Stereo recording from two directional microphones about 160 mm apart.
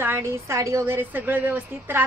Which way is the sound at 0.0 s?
15° right (ahead or behind).